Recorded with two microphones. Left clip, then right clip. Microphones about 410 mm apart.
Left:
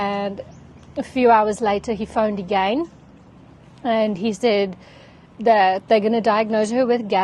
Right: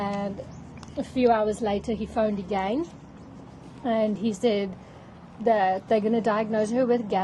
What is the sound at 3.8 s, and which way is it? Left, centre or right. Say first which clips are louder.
A woman's voice: left 5 dB; left.